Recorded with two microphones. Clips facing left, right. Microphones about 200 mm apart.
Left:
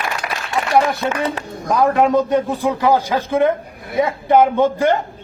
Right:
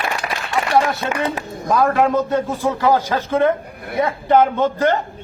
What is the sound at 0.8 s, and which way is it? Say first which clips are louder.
A man's voice: left 3 dB; 15° left (ahead or behind).